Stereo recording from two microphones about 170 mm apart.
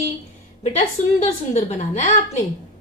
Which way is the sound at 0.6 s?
40° left (ahead or behind).